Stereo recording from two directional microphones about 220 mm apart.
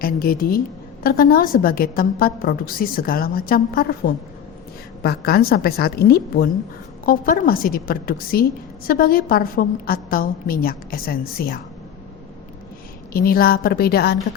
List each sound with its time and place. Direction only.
0.0 s a woman's voice: 40° left (ahead or behind)
13.1 s a woman's voice: 40° left (ahead or behind)